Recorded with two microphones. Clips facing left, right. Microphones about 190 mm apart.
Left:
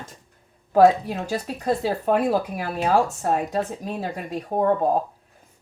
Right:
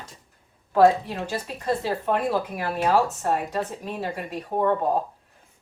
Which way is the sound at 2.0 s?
40° left (ahead or behind).